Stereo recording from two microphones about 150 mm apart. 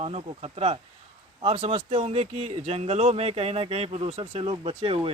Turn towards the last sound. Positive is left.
turn(degrees=-35)  # may be behind; listen again after turning